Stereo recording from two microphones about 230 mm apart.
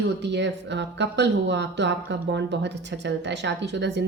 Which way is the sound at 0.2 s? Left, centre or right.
Right.